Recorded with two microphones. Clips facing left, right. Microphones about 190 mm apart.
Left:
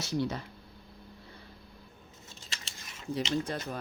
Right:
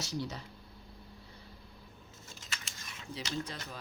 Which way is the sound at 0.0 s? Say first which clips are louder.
Left 6 dB; 55° left (ahead or behind).